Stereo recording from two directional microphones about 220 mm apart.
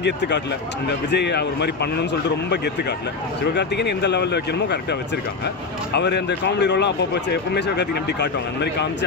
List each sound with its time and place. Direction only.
0.0 s a man's voice: 50° left (ahead or behind)
3.5 s a man's voice: 50° left (ahead or behind)
5.9 s a man's voice: 50° left (ahead or behind)